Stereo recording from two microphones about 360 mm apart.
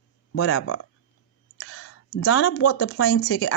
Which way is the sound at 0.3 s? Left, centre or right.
Left.